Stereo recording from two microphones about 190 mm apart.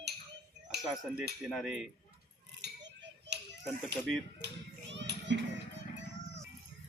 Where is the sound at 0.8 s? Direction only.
Centre (ahead or behind).